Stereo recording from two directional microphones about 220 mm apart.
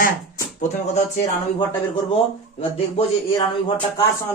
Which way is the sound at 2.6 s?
25° left (ahead or behind).